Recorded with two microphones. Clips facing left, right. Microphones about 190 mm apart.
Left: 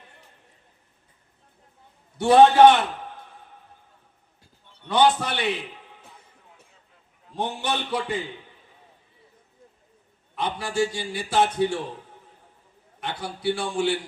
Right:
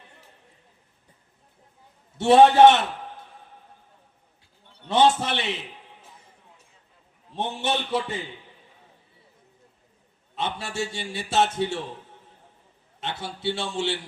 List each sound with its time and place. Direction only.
2.1 s a man's voice: 25° right (ahead or behind)
4.9 s a man's voice: 25° right (ahead or behind)
7.3 s a man's voice: 25° right (ahead or behind)
10.3 s a man's voice: 25° right (ahead or behind)
13.0 s a man's voice: 25° right (ahead or behind)